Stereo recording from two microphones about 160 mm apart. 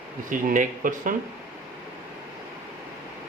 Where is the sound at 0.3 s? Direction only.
55° right (ahead or behind).